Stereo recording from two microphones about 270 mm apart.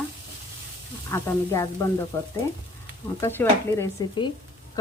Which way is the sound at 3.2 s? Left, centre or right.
Centre.